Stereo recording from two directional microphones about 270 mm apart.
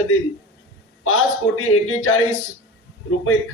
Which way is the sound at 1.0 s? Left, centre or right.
Left.